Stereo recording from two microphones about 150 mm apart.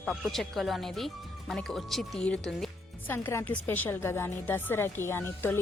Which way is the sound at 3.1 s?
15° left (ahead or behind).